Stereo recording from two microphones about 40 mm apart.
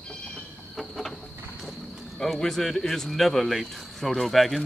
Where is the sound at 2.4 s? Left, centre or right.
Centre.